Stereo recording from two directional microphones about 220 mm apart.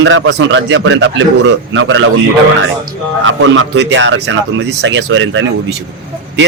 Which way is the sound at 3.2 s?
60° right (ahead or behind).